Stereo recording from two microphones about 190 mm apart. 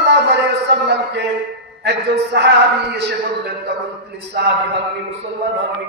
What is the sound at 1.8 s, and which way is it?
A man's voice, 60° right (ahead or behind).